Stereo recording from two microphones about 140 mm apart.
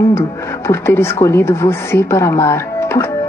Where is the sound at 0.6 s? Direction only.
15° left (ahead or behind).